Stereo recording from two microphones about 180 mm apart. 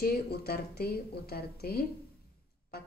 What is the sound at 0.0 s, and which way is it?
Speech, 60° left (ahead or behind).